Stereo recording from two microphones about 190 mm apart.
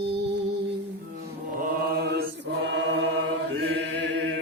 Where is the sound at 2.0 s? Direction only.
60° right (ahead or behind).